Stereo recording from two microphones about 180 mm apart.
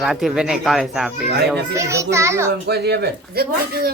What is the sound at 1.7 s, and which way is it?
Speech, 15° right (ahead or behind).